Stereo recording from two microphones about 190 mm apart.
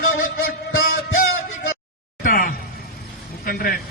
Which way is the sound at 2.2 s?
45° left (ahead or behind).